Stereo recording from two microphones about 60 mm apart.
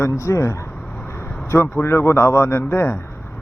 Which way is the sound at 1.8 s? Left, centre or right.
Left.